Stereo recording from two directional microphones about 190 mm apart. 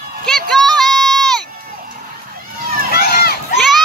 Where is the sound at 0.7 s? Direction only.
Centre (ahead or behind).